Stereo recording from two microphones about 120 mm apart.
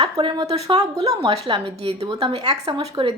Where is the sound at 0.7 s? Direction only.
30° right (ahead or behind).